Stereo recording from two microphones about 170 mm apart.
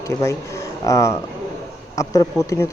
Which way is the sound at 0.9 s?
20° left (ahead or behind).